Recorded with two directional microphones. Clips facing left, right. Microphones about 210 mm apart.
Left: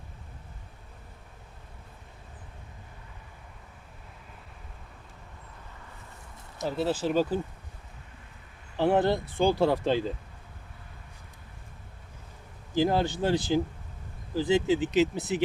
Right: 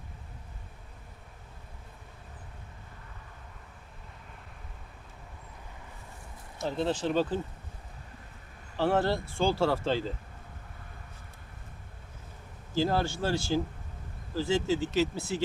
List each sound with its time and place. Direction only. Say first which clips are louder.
6.7 s speech: left 2 dB; 5° left (ahead or behind)
8.7 s speech: left 3 dB; 15° left (ahead or behind)
12.7 s speech: left 3 dB; 15° left (ahead or behind)